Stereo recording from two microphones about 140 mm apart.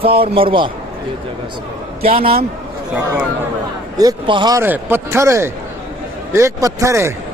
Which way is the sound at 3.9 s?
30° right (ahead or behind).